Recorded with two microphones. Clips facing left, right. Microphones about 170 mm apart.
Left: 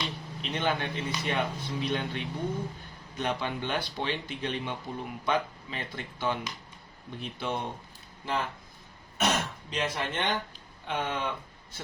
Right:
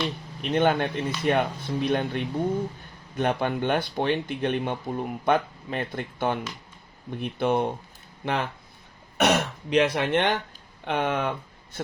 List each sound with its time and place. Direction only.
0.5 s speech: 55° right (ahead or behind)